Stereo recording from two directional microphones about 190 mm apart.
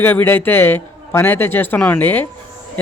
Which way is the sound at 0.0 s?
10° left (ahead or behind).